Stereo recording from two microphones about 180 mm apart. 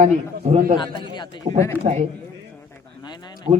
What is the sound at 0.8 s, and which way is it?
Speech, 25° left (ahead or behind).